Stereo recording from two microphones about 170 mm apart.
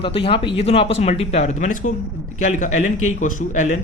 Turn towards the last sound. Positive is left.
turn(degrees=50)  # may be behind; listen again after turning